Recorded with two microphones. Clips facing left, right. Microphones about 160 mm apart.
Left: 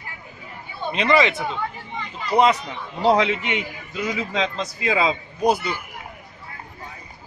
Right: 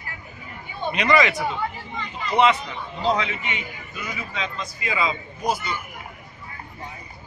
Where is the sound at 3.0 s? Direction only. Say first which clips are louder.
Left 6 dB; 70° left (ahead or behind).